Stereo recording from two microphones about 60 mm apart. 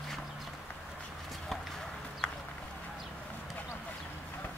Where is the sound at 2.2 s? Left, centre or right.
Left.